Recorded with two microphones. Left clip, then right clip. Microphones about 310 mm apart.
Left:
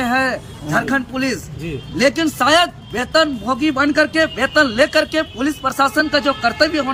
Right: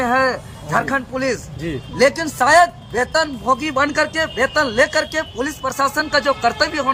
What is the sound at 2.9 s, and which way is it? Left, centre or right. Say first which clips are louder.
Speech: left 2 dB; centre.